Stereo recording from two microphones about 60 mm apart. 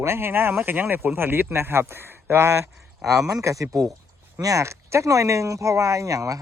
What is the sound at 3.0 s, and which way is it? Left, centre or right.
Speech, centre.